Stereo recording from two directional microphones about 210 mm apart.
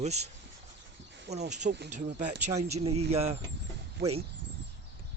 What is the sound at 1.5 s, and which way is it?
Speech, 35° right (ahead or behind).